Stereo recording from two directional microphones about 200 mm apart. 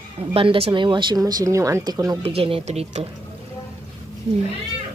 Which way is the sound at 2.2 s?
30° right (ahead or behind).